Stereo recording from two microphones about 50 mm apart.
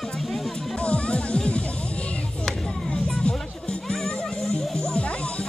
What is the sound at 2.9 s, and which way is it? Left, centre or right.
Music, centre.